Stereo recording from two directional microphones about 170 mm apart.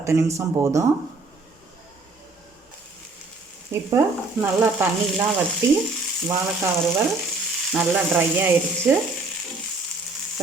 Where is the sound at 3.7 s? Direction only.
15° right (ahead or behind).